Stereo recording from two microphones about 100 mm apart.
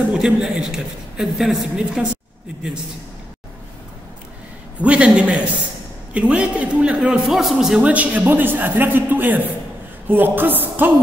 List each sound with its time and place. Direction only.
0.1 s a man's voice: 5° right (ahead or behind)
4.8 s a man's voice: 10° right (ahead or behind)
10.0 s music: 20° right (ahead or behind)